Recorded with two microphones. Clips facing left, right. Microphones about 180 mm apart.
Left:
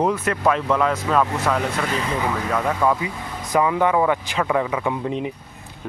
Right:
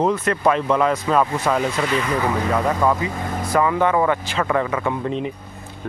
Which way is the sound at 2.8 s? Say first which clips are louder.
Right 1 dB; 15° left (ahead or behind).